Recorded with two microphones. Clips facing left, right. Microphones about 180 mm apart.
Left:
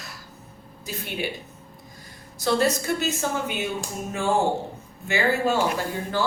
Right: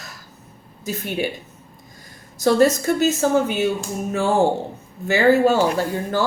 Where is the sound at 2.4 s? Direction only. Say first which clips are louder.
Right 6 dB; 45° right (ahead or behind).